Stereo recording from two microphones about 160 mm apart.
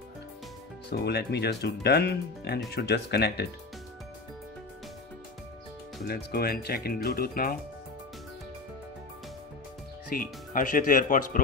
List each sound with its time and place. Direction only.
0.8 s speech: 90° left
6.0 s speech: 75° left (ahead or behind)
10.0 s speech: 65° left (ahead or behind)